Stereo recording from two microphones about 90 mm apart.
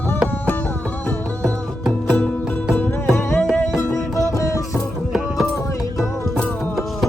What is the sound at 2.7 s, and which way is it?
Music, 25° left (ahead or behind).